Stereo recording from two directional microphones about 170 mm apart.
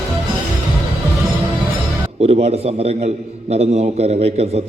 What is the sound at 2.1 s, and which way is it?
A man's voice, 40° right (ahead or behind).